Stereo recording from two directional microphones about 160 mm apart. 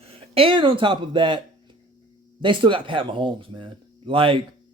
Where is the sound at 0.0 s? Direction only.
35° right (ahead or behind).